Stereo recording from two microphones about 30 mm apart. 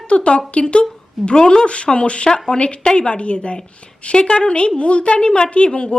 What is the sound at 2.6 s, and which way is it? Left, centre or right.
A woman's voice, left.